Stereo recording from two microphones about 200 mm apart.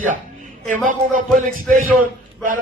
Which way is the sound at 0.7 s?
40° right (ahead or behind).